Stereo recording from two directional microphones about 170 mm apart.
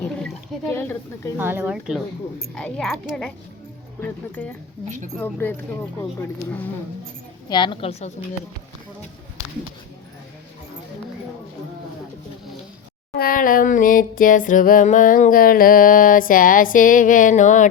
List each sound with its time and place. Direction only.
0.7 s speech: 15° left (ahead or behind)
1.4 s speech: 10° right (ahead or behind)
2.6 s speech: 5° left (ahead or behind)
7.5 s a woman's voice: 30° left (ahead or behind)
13.1 s music: 55° left (ahead or behind)